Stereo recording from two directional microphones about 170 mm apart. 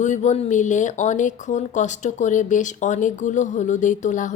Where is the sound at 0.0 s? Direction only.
45° left (ahead or behind).